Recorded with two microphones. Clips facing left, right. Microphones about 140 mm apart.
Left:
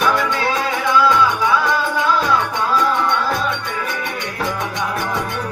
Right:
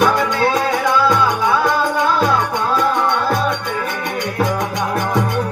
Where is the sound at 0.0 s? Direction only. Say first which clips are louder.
Right 3 dB; 50° right (ahead or behind).